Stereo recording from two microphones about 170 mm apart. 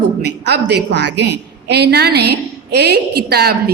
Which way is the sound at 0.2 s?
75° right (ahead or behind).